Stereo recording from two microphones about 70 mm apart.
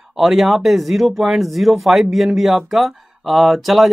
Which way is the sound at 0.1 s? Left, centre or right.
Centre.